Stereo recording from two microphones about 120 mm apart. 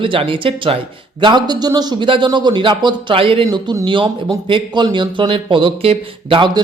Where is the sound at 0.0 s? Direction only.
45° right (ahead or behind).